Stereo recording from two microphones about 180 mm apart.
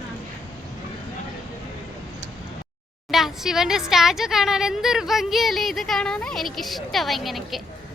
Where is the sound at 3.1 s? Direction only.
Centre (ahead or behind).